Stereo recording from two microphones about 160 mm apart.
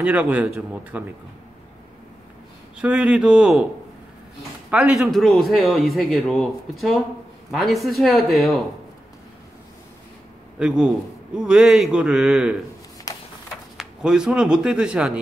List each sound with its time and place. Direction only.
0.0 s speech: 10° right (ahead or behind)
2.8 s speech: 5° right (ahead or behind)
4.6 s a man's voice: 5° right (ahead or behind)
10.6 s a man's voice: 5° right (ahead or behind)
13.1 s a sound: 20° left (ahead or behind)
13.7 s speech: 5° right (ahead or behind)